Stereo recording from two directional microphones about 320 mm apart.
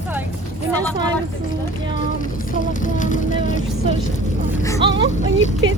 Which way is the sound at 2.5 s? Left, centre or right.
Left.